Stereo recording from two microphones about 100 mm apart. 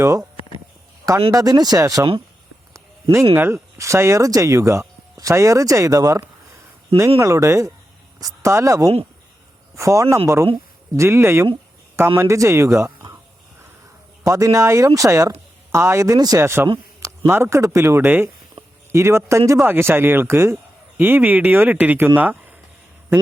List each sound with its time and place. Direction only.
0.0 s speech: 35° right (ahead or behind)
1.3 s speech: 40° right (ahead or behind)
2.7 s a sound: 30° right (ahead or behind)
3.3 s speech: 25° right (ahead or behind)
14.3 s speech: 35° right (ahead or behind); by 22.5 s 15° right (ahead or behind)